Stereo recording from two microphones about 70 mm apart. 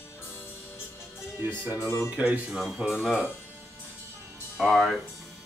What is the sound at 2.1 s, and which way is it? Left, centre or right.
Speech, centre.